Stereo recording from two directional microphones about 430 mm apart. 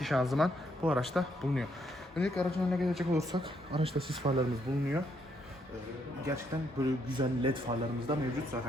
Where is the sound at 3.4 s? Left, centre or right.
Centre.